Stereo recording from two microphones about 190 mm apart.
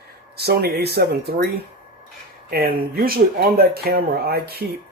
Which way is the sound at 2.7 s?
50° right (ahead or behind).